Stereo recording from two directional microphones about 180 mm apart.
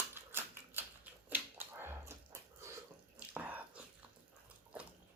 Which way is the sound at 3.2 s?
10° right (ahead or behind).